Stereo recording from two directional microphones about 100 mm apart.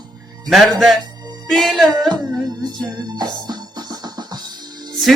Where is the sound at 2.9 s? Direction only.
45° right (ahead or behind).